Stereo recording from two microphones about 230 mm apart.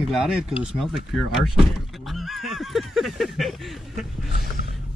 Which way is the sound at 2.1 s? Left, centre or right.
Centre.